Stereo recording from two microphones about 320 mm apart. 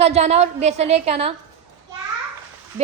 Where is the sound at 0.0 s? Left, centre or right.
Centre.